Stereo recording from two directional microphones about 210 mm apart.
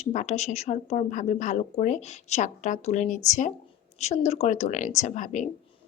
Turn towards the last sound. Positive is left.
turn(degrees=35)  # may be behind; listen again after turning